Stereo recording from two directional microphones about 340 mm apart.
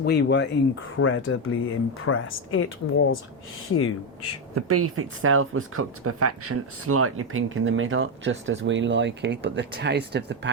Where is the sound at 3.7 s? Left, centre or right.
Left.